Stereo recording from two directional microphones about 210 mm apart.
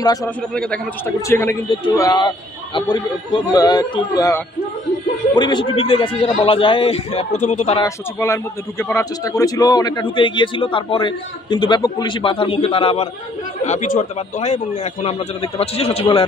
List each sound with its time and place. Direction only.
0.0 s a man's voice: 20° left (ahead or behind)
0.6 s a man's voice: 5° left (ahead or behind); by 7.8 s 30° left (ahead or behind)
7.8 s a man's voice: 15° left (ahead or behind)